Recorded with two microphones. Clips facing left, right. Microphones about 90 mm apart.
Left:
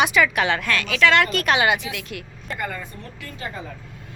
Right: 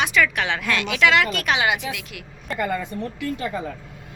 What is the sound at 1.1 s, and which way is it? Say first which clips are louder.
Speech: left 1 dB; centre (ahead or behind).